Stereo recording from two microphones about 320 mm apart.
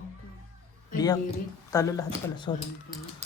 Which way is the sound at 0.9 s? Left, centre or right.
Centre.